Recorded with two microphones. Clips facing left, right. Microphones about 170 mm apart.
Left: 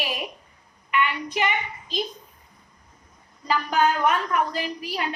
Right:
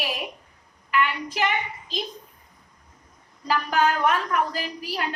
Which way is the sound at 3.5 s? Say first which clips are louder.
Even; centre (ahead or behind).